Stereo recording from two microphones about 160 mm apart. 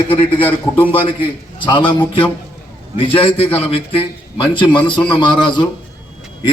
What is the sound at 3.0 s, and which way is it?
A man's voice, 35° left (ahead or behind).